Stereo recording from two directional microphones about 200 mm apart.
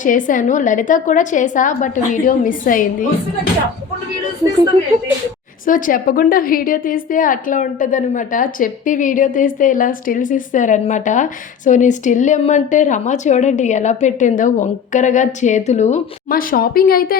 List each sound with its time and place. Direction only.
0.0 s a woman's voice: 40° left (ahead or behind)
5.6 s a woman's voice: 40° left (ahead or behind)